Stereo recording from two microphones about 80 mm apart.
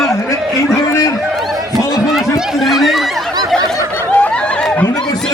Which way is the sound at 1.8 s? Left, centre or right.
Left.